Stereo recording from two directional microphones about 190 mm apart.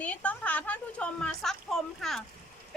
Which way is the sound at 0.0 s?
5° left (ahead or behind).